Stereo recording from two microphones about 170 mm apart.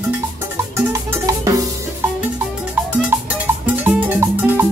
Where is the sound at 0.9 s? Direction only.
20° right (ahead or behind).